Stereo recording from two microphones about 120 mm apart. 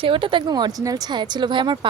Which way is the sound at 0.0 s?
45° right (ahead or behind).